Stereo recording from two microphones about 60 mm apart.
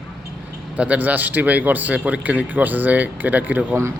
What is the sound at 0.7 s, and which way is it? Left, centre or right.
A man's voice, right.